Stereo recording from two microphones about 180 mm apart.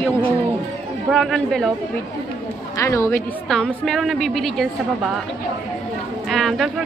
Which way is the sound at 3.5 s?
5° left (ahead or behind).